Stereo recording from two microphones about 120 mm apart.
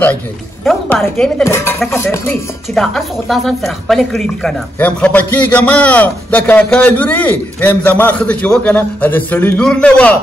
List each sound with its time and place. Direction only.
1.0 s a man's voice: 10° left (ahead or behind)
1.4 s speech: 20° left (ahead or behind)
2.7 s speech: 5° left (ahead or behind)
4.7 s a man's voice: 10° left (ahead or behind)